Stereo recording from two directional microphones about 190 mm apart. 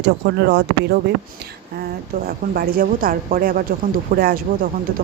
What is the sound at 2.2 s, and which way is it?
A woman's voice, 50° right (ahead or behind).